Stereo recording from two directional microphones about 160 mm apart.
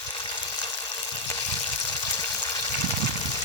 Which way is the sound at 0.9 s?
25° left (ahead or behind).